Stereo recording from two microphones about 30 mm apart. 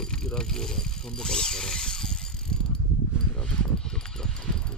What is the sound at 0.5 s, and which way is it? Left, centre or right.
Speech, centre.